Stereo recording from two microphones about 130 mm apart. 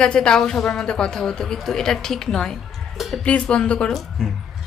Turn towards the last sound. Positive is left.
turn(degrees=5)  # may be behind; listen again after turning